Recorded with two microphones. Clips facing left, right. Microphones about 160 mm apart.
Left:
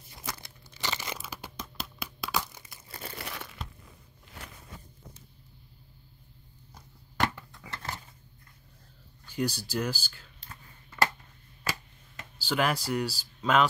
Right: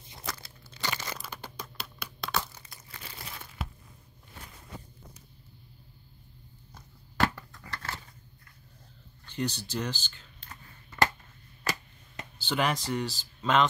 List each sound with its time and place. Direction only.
0.3 s crumpling: 15° left (ahead or behind)
3.2 s crumpling: 70° left (ahead or behind)
6.7 s a sound: 10° left (ahead or behind)
7.7 s scissors: 20° left (ahead or behind)
9.2 s speech: 10° left (ahead or behind)
10.5 s a sound: 5° right (ahead or behind)
12.4 s speech: 5° left (ahead or behind)